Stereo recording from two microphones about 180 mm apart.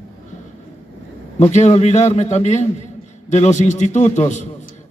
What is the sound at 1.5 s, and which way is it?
A man's voice, 40° left (ahead or behind).